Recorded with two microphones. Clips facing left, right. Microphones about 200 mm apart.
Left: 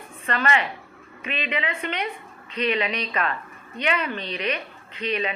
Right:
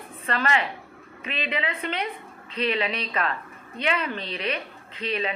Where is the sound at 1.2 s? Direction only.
35° right (ahead or behind).